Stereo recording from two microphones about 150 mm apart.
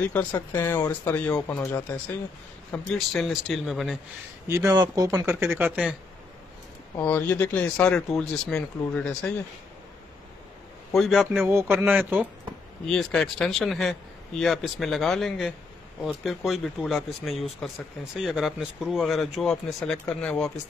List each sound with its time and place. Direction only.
0.5 s speech: 15° left (ahead or behind)
2.7 s speech: 5° left (ahead or behind)
4.5 s speech: 20° right (ahead or behind)
7.0 s speech: 10° left (ahead or behind)
11.0 s speech: centre (ahead or behind)
11.7 s speech: 10° right (ahead or behind)
12.8 s speech: 5° left (ahead or behind)